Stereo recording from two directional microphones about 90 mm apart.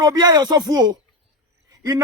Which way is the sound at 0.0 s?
45° right (ahead or behind).